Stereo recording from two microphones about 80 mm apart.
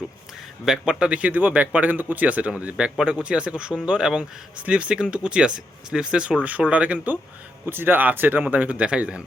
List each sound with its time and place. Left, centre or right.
0.6 s speech: centre